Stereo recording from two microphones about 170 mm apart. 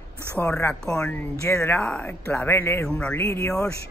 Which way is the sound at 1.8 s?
5° left (ahead or behind).